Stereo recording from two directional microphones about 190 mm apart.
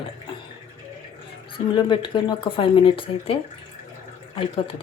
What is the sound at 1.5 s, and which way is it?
Speech, 25° left (ahead or behind).